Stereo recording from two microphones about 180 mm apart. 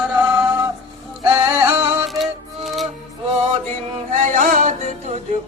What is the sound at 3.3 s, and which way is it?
Male singing, 35° right (ahead or behind).